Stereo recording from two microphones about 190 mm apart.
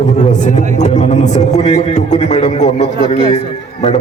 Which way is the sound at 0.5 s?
40° left (ahead or behind).